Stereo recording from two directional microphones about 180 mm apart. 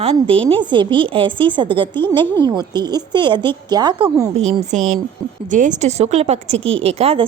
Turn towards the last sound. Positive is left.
turn(degrees=-35)  # may be behind; listen again after turning